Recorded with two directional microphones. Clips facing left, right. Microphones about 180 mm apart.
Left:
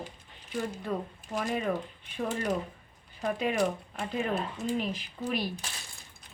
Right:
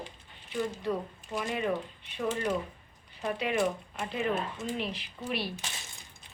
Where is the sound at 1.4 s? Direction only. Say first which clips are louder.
Left 1 dB; 45° left (ahead or behind).